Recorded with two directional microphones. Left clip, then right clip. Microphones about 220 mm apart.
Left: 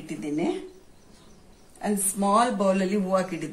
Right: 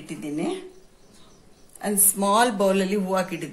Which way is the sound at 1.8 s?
45° right (ahead or behind).